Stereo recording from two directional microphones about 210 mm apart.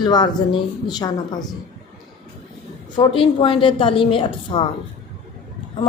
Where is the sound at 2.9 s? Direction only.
25° left (ahead or behind).